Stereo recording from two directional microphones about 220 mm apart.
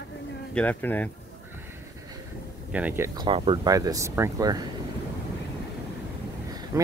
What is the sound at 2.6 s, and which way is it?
Speech, 5° right (ahead or behind).